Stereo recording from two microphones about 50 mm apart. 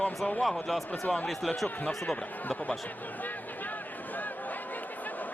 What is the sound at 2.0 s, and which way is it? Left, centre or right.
Speech, left.